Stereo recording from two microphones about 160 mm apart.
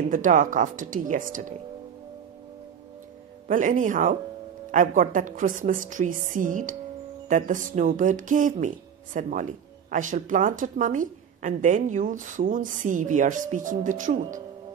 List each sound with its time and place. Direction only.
0.1 s speech: 55° right (ahead or behind)
3.4 s speech: 55° right (ahead or behind)